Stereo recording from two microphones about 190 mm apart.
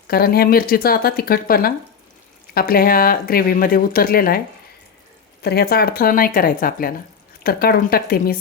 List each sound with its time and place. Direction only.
0.1 s speech: 55° left (ahead or behind)
5.4 s speech: 55° left (ahead or behind)